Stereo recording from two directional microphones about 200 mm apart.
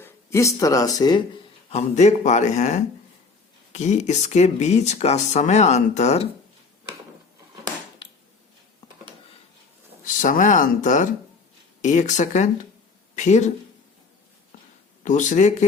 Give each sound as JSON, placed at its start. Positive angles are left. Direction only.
{"t": 0.0, "sound": "speech", "side_deg": 15}
{"t": 1.7, "sound": "speech", "side_deg": 35}
{"t": 8.0, "sound": "a sound", "side_deg": 25}
{"t": 10.1, "sound": "speech", "side_deg": 40}
{"t": 15.0, "sound": "speech", "side_deg": 40}